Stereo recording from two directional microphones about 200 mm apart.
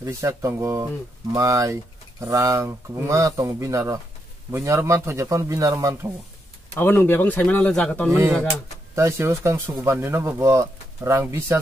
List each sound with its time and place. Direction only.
0.0 s speech: 15° right (ahead or behind)
6.7 s speech: 10° left (ahead or behind)
8.9 s speech: 15° right (ahead or behind)